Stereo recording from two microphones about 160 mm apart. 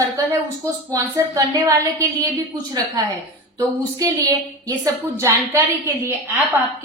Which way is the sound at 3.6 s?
20° right (ahead or behind).